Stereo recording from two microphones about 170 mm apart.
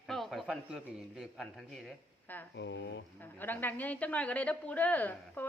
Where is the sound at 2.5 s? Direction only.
90° left.